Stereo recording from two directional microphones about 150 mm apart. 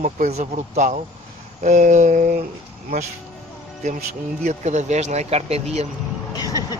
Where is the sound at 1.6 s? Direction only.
55° right (ahead or behind).